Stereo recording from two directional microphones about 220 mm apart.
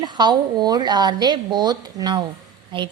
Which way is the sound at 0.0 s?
20° right (ahead or behind).